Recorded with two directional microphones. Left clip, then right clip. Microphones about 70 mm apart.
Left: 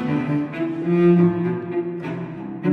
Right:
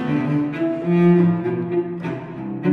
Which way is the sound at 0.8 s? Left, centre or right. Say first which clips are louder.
Left 2 dB; left.